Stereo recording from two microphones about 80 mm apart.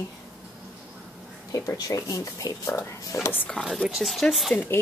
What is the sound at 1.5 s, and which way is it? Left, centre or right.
Speech, left.